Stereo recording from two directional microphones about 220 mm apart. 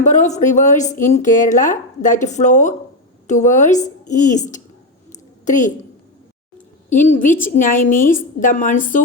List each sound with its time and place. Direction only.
0.0 s a woman's voice: 35° left (ahead or behind)
6.9 s a woman's voice: 35° left (ahead or behind)